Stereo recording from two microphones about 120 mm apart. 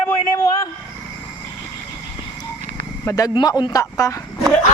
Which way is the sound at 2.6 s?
90° right.